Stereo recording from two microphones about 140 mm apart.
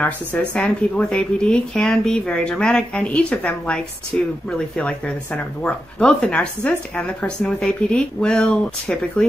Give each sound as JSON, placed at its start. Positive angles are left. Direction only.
{"t": 0.0, "sound": "speech", "side_deg": 10}